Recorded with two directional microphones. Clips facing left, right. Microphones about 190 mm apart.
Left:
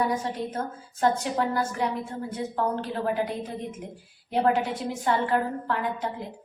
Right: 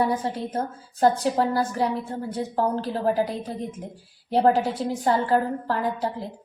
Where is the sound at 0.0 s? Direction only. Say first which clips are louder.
Right 3 dB; 30° right (ahead or behind).